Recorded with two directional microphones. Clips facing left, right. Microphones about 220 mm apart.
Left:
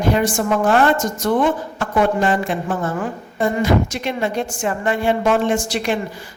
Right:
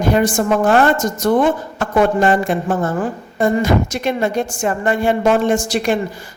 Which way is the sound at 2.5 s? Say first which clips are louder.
Right 4 dB; 45° right (ahead or behind).